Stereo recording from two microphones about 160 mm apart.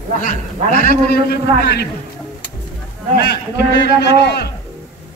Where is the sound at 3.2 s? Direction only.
90° left.